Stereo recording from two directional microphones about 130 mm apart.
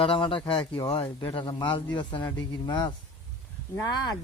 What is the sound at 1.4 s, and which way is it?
A man's voice, 35° left (ahead or behind).